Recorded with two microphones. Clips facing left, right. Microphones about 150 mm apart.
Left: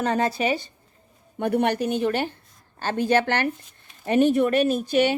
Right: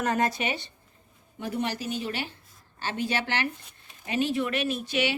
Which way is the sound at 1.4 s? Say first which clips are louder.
Left 9 dB; 60° left (ahead or behind).